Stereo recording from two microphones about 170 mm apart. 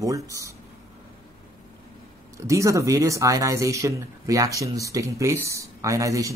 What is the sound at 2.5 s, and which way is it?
Speech, 20° right (ahead or behind).